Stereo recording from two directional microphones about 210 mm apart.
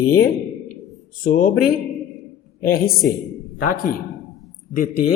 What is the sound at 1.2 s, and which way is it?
Speech, 45° left (ahead or behind).